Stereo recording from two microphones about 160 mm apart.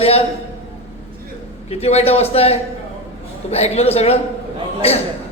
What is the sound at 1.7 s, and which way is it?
A man's voice, 40° left (ahead or behind).